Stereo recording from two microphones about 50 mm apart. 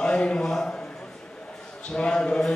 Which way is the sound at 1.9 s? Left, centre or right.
Centre.